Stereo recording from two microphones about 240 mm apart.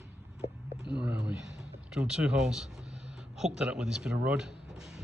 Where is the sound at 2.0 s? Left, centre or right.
Centre.